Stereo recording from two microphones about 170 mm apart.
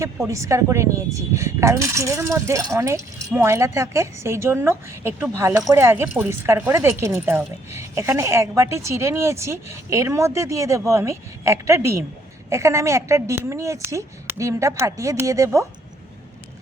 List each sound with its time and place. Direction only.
0.3 s speech: 20° right (ahead or behind)